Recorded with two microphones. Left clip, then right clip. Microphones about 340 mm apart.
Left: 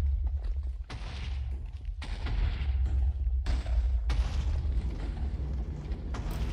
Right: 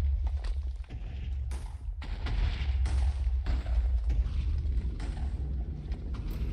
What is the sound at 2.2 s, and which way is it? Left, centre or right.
Artillery fire, centre.